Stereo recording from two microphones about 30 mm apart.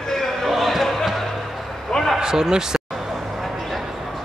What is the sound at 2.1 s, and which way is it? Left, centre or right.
Speech, centre.